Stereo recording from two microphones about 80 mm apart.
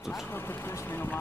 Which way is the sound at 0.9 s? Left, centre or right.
Left.